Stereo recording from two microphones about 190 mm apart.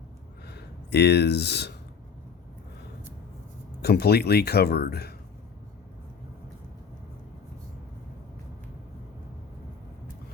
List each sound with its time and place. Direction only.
0.4 s speech: 60° left (ahead or behind)
3.8 s speech: 55° left (ahead or behind)